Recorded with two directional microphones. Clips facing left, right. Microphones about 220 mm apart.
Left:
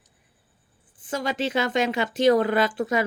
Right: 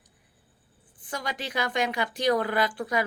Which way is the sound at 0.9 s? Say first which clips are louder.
Left 7 dB; 20° left (ahead or behind).